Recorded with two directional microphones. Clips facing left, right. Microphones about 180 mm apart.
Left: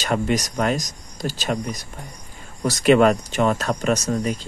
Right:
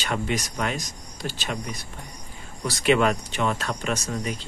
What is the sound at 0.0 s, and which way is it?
Speech, 40° left (ahead or behind).